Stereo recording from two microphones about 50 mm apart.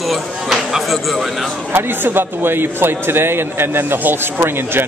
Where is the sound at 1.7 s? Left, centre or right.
Right.